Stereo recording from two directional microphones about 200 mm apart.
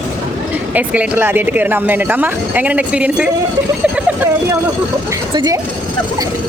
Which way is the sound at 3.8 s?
10° right (ahead or behind).